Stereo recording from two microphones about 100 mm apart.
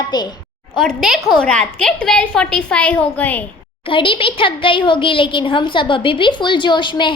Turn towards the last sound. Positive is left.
turn(degrees=50)  # may be behind; listen again after turning